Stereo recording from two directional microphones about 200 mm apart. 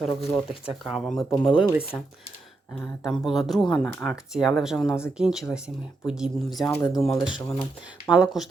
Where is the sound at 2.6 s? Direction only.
Centre (ahead or behind).